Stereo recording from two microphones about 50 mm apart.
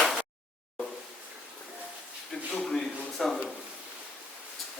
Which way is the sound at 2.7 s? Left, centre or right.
Centre.